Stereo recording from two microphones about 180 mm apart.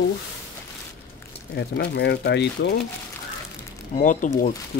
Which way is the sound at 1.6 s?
65° left (ahead or behind).